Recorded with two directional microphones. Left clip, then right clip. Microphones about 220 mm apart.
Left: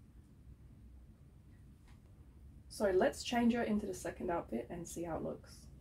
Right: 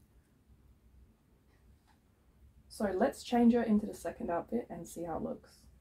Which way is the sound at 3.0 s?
25° right (ahead or behind).